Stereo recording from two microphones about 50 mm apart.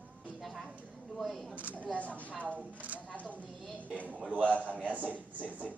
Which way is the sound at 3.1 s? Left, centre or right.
Left.